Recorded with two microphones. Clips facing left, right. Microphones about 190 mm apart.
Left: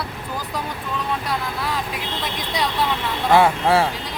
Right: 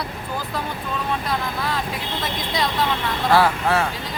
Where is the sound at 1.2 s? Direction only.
10° left (ahead or behind).